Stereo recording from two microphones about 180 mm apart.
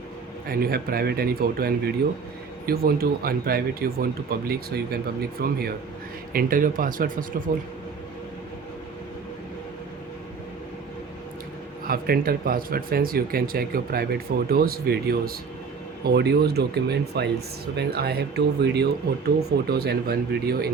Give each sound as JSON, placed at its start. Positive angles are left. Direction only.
{"t": 0.4, "sound": "speech", "side_deg": -55}
{"t": 11.9, "sound": "speech", "side_deg": -55}